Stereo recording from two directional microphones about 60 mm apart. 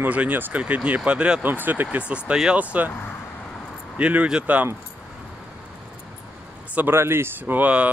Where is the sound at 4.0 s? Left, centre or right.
Right.